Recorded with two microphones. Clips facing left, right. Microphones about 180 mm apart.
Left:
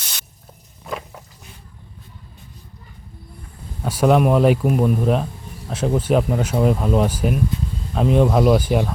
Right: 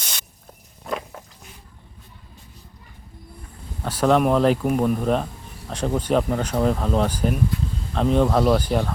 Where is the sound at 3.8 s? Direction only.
10° left (ahead or behind).